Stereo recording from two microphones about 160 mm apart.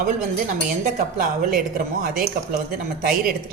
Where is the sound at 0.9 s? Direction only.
60° right (ahead or behind).